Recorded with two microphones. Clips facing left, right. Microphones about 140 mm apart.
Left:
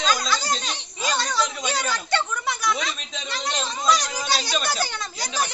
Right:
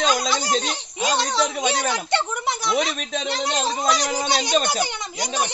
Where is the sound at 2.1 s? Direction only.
25° right (ahead or behind).